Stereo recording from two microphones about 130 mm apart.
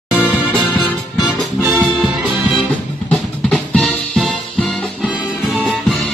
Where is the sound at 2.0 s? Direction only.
5° right (ahead or behind).